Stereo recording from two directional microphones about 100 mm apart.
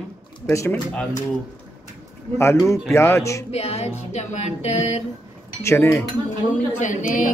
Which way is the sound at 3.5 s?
90° left.